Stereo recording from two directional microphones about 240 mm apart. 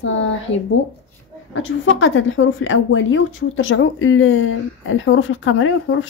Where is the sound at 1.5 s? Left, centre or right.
Left.